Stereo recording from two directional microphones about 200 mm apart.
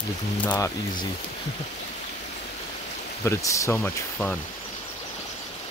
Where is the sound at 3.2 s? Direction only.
15° left (ahead or behind).